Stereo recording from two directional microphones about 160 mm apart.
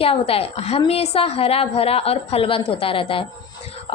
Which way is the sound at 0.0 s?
35° left (ahead or behind).